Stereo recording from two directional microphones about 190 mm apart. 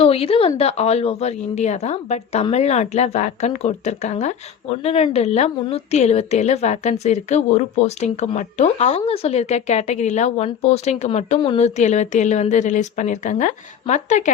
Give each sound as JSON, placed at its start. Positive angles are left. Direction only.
{"t": 0.0, "sound": "a woman's voice", "side_deg": 30}